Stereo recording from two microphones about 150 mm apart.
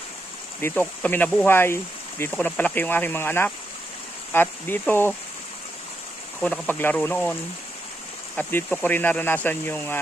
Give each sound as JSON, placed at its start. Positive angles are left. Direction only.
{"t": 0.6, "sound": "speech", "side_deg": 15}
{"t": 6.4, "sound": "speech", "side_deg": 10}
{"t": 8.4, "sound": "speech", "side_deg": 10}